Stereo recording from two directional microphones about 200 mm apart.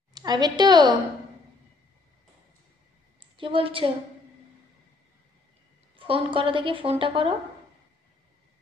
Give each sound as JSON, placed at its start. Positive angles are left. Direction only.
{"t": 0.1, "sound": "a woman's voice", "side_deg": -20}
{"t": 3.2, "sound": "a woman's voice", "side_deg": -25}
{"t": 5.9, "sound": "a woman's voice", "side_deg": -25}